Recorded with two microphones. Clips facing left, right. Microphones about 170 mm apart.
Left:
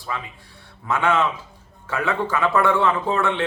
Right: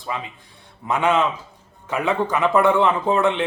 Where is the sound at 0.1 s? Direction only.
20° right (ahead or behind).